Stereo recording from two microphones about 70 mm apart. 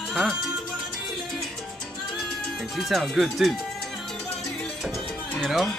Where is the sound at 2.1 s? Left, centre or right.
Centre.